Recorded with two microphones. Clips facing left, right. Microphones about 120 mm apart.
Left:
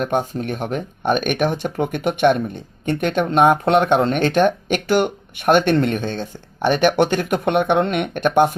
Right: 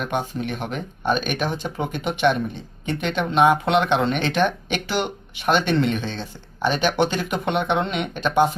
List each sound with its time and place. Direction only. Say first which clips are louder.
0.0 s speech: left 4 dB; 45° left (ahead or behind)